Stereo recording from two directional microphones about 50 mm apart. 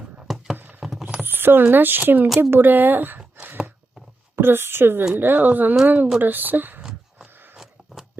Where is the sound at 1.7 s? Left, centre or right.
Right.